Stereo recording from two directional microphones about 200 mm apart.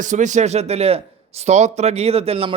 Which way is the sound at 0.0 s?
40° right (ahead or behind).